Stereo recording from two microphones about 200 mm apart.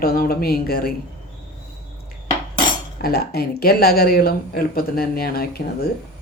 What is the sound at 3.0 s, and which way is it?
Speech, 50° left (ahead or behind).